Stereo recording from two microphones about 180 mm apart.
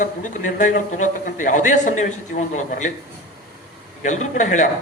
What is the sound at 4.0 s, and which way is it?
Speech, 40° left (ahead or behind).